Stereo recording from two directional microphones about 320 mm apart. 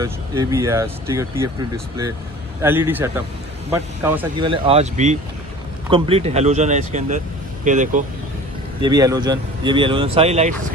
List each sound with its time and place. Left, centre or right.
0.0 s speech: centre
8.8 s speech: centre